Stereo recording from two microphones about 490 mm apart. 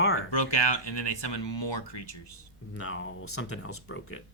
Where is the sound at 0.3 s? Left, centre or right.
Left.